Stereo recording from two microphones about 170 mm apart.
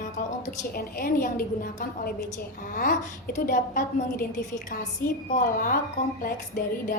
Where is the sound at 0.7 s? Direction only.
55° left (ahead or behind).